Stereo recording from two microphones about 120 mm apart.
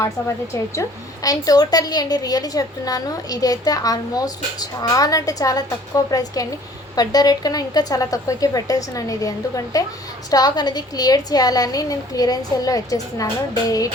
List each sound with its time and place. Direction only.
0.5 s a woman's voice: 30° left (ahead or behind)